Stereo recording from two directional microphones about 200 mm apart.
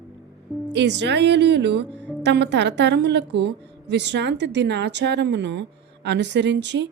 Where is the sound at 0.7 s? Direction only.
60° right (ahead or behind).